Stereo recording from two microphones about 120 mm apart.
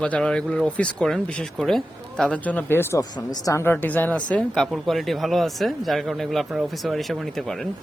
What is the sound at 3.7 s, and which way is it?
A woman's voice, 15° left (ahead or behind).